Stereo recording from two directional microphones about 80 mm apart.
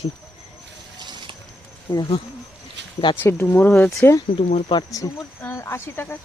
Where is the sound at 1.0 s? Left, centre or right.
Right.